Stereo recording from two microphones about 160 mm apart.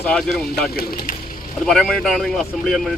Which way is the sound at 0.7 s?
70° left (ahead or behind).